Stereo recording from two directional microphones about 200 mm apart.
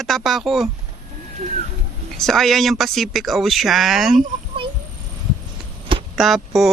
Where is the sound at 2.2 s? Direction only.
Centre (ahead or behind).